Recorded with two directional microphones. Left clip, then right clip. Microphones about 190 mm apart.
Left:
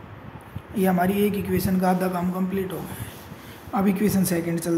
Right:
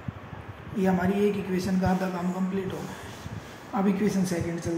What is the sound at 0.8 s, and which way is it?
Speech, 40° left (ahead or behind).